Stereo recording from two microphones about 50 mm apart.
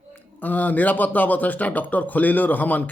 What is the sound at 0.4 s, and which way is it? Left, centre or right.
Speech, left.